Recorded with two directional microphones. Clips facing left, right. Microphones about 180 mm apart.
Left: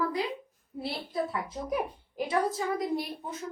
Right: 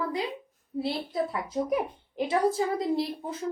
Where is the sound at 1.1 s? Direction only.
20° right (ahead or behind).